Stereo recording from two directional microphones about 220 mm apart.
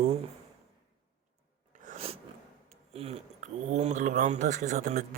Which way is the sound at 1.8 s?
30° right (ahead or behind).